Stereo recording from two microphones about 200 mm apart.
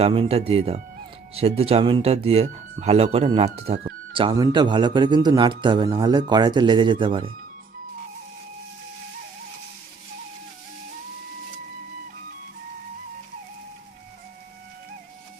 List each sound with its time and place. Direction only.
0.0 s a man's voice: 30° right (ahead or behind)